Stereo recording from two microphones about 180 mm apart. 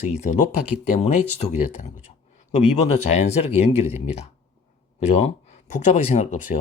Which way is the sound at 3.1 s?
35° left (ahead or behind).